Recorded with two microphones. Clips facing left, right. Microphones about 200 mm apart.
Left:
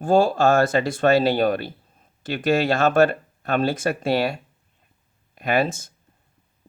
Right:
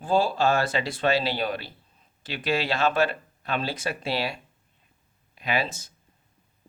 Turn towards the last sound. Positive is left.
turn(degrees=50)  # may be behind; listen again after turning